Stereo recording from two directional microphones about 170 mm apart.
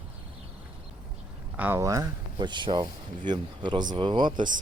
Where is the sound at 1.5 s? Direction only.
10° right (ahead or behind); by 4.4 s 25° right (ahead or behind).